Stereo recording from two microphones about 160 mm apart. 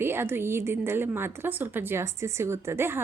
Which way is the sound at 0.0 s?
15° right (ahead or behind).